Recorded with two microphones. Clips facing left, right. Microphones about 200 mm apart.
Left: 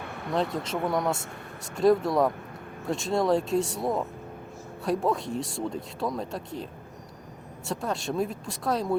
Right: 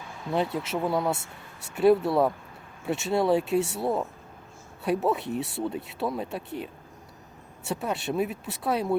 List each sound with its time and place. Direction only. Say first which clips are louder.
0.0 s vehicle: left 1 dB; 60° left (ahead or behind)
0.5 s speech: right 1 dB; 5° right (ahead or behind)
7.7 s speech: right 1 dB; 5° right (ahead or behind)